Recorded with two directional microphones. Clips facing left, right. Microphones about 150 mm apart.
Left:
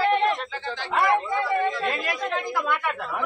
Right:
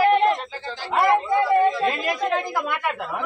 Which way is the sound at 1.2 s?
15° right (ahead or behind).